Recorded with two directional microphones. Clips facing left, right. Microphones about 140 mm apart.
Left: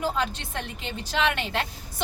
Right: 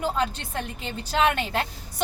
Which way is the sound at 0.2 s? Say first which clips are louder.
Right 2 dB; 40° right (ahead or behind).